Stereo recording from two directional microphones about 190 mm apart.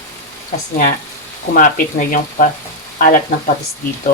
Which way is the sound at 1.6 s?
45° left (ahead or behind).